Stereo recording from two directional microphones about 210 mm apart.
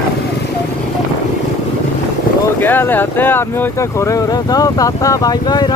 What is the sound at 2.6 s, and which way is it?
Speech, 10° left (ahead or behind).